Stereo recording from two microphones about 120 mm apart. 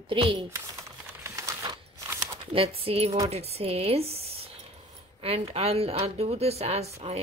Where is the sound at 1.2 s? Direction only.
25° right (ahead or behind).